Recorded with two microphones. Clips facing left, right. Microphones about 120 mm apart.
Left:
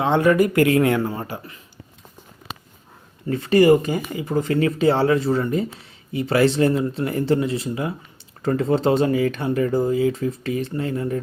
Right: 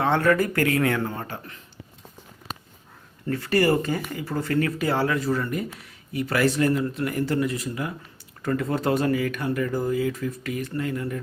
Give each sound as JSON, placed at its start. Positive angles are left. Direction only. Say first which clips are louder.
{"t": 0.0, "sound": "speech", "louder": "left 4 dB", "side_deg": 15}
{"t": 3.2, "sound": "speech", "louder": "left 7 dB", "side_deg": 20}